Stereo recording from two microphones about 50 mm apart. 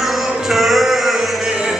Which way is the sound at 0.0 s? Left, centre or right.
Centre.